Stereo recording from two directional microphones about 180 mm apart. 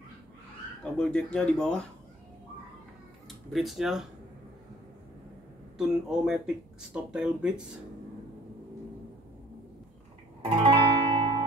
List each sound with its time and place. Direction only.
0.9 s speech: 5° left (ahead or behind)
3.5 s speech: centre (ahead or behind)
5.8 s speech: 5° right (ahead or behind)
10.6 s music: 25° right (ahead or behind)